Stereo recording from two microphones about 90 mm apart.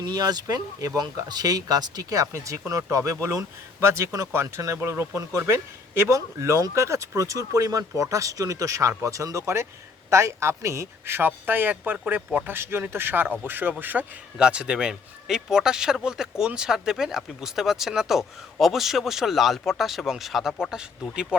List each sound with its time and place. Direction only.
0.0 s speech: 50° right (ahead or behind); by 20.8 s 5° right (ahead or behind)